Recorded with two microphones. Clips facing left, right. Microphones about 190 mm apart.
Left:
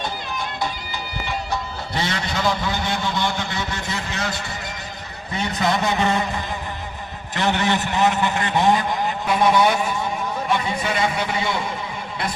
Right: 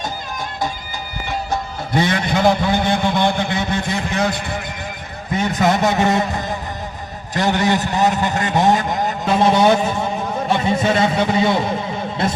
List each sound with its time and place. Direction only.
1.5 s a man's voice: 50° right (ahead or behind)
5.4 s a man's voice: 45° right (ahead or behind)
7.3 s a man's voice: 40° right (ahead or behind)
9.2 s a man's voice: 25° right (ahead or behind)